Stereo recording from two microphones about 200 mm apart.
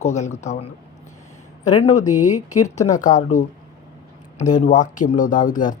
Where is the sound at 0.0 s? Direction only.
35° left (ahead or behind).